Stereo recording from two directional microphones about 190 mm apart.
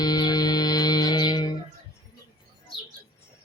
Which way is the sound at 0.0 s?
20° left (ahead or behind).